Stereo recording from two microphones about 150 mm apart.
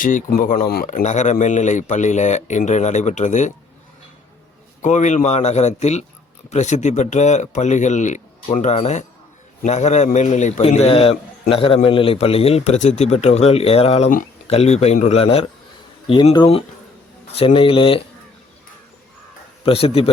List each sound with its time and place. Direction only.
0.0 s a man's voice: 65° left (ahead or behind)
4.8 s a man's voice: 55° left (ahead or behind); by 18.0 s 35° left (ahead or behind)
19.6 s speech: 40° left (ahead or behind)